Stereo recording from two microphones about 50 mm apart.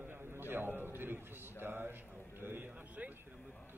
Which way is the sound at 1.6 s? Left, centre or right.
Right.